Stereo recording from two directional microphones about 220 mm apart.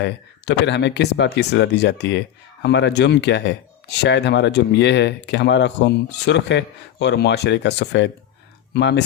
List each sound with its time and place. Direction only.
0.0 s speech: 50° left (ahead or behind)